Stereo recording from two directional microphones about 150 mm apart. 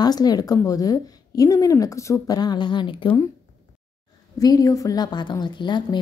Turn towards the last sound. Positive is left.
turn(degrees=30)  # may be behind; listen again after turning